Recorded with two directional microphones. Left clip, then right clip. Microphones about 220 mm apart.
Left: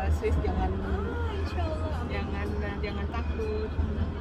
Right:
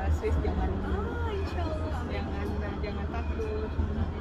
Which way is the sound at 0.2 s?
20° left (ahead or behind).